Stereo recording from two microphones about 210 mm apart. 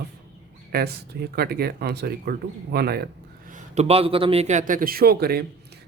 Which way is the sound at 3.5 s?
30° right (ahead or behind).